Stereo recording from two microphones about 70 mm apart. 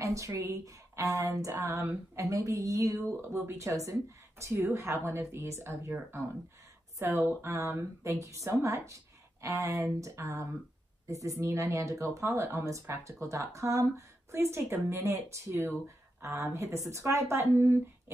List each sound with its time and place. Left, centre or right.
0.0 s speech: right